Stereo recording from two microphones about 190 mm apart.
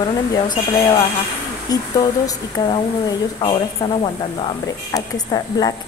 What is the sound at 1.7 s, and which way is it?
Speech, 20° left (ahead or behind).